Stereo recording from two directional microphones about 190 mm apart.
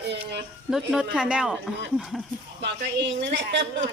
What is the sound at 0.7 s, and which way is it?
A woman's voice, centre (ahead or behind).